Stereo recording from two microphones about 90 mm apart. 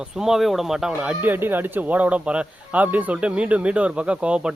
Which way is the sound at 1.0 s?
20° right (ahead or behind).